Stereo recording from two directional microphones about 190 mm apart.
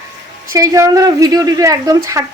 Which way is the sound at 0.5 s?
15° right (ahead or behind).